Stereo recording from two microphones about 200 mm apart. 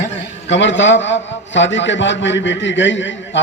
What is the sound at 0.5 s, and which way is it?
A man's voice, 65° left (ahead or behind).